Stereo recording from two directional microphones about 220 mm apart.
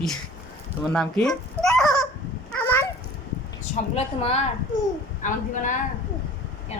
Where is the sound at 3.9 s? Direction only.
30° left (ahead or behind).